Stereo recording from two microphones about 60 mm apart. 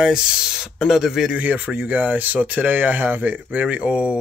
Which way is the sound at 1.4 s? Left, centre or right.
Right.